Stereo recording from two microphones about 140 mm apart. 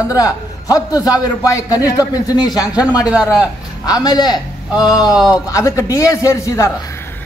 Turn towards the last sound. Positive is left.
turn(degrees=20)  # may be behind; listen again after turning